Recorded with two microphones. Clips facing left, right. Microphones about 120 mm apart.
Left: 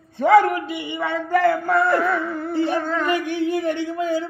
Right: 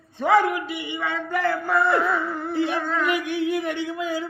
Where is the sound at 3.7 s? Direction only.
45° left (ahead or behind).